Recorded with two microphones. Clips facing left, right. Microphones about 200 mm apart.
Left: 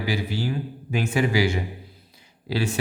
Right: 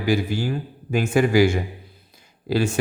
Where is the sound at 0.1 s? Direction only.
50° right (ahead or behind).